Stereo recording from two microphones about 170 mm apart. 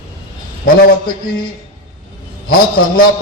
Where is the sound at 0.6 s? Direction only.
60° left (ahead or behind).